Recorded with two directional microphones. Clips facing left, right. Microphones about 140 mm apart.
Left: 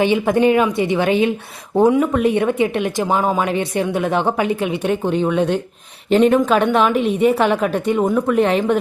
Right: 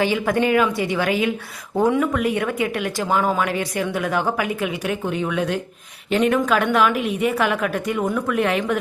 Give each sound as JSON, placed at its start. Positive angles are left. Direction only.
{"t": 0.0, "sound": "speech", "side_deg": 20}